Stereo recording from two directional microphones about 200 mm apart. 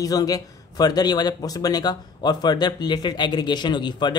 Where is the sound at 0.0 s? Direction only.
20° left (ahead or behind).